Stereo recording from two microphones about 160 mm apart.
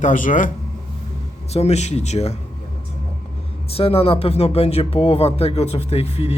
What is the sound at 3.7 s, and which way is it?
Speech, 35° left (ahead or behind).